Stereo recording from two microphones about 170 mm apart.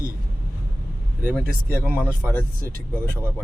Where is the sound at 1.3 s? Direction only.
10° left (ahead or behind).